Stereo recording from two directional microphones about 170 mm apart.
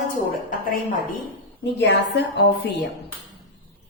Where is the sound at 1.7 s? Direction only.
85° left.